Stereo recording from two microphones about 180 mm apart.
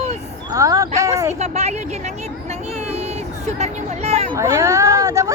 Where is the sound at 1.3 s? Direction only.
35° right (ahead or behind).